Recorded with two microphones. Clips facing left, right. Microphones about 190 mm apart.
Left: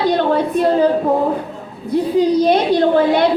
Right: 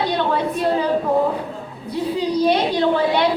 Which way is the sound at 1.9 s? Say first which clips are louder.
Left 6 dB; 45° left (ahead or behind).